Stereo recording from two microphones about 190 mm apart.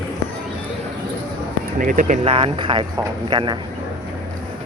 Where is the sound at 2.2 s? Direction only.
30° right (ahead or behind).